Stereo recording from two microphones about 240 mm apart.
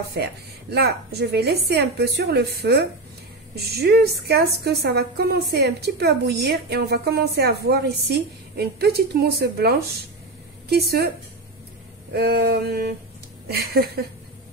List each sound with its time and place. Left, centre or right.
0.2 s a woman's voice: right
12.1 s a woman's voice: right